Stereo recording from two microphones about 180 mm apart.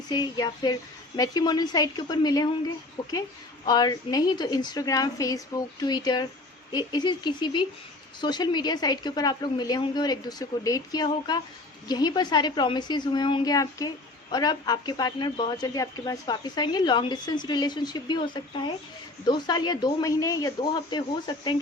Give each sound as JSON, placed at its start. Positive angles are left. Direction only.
{"t": 0.1, "sound": "a woman's voice", "side_deg": 20}